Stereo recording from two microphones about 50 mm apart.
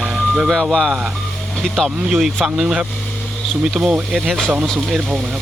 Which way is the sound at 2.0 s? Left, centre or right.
Centre.